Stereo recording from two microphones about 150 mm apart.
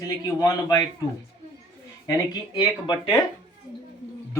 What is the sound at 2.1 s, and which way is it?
Speech, 25° left (ahead or behind).